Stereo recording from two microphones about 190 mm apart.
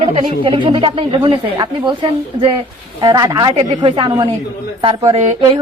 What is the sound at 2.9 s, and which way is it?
Speech, 20° right (ahead or behind).